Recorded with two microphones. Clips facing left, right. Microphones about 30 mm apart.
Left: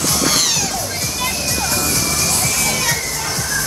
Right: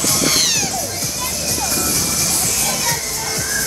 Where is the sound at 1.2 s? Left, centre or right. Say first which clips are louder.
Left 3 dB; left.